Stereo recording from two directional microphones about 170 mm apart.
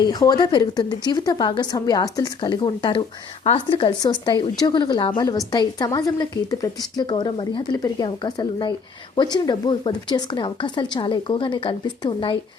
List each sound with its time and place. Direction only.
0.0 s speech: 25° left (ahead or behind)